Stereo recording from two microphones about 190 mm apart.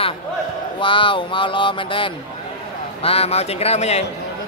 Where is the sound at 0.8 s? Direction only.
25° left (ahead or behind).